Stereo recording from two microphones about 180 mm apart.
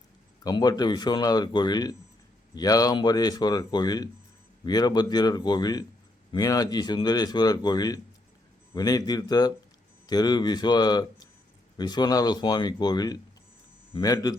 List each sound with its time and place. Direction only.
0.4 s speech: 20° left (ahead or behind)